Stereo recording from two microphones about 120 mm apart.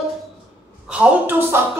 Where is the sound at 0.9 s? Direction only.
10° right (ahead or behind).